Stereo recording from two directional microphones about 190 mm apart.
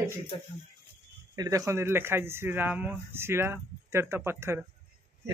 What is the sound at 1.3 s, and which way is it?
Speech, 20° right (ahead or behind).